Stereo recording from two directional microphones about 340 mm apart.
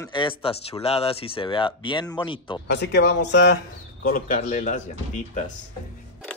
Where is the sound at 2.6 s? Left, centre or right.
Left.